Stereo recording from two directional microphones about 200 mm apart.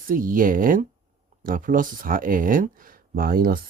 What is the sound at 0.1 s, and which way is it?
Speech, 45° right (ahead or behind).